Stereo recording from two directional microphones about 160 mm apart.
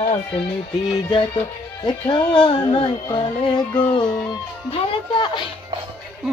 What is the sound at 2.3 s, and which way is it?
Female singing, 30° left (ahead or behind).